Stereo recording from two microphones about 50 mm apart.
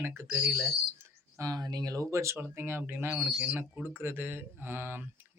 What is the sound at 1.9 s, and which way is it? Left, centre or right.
Speech, right.